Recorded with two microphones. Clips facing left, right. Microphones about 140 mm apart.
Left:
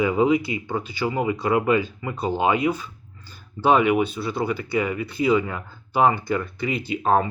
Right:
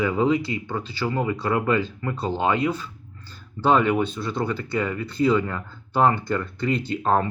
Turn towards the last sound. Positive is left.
turn(degrees=10)  # may be behind; listen again after turning